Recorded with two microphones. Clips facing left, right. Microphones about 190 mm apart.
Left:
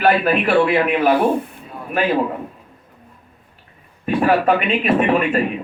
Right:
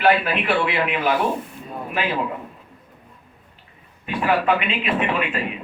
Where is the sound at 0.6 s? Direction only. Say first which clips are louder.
Left 6 dB; 45° left (ahead or behind).